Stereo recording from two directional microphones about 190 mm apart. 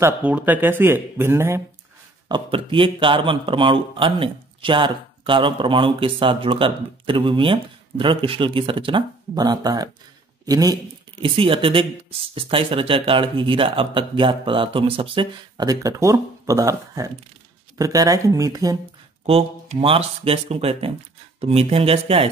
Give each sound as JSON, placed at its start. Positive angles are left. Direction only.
{"t": 0.0, "sound": "speech", "side_deg": -10}
{"t": 2.2, "sound": "speech", "side_deg": -25}
{"t": 19.2, "sound": "speech", "side_deg": -30}